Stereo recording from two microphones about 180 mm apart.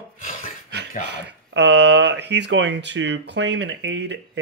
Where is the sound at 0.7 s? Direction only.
70° right (ahead or behind).